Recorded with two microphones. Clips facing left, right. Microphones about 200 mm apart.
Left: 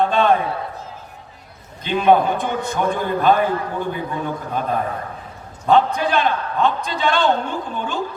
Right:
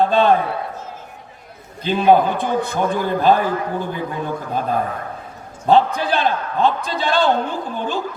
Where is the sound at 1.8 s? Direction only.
30° right (ahead or behind).